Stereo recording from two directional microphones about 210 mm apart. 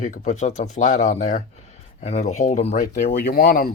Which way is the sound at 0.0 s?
35° left (ahead or behind).